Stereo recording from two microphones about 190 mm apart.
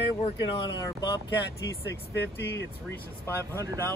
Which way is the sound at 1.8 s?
70° left (ahead or behind).